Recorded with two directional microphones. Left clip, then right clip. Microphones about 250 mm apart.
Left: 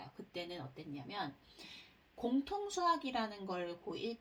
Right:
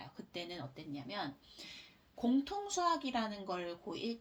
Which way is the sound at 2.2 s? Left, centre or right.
Right.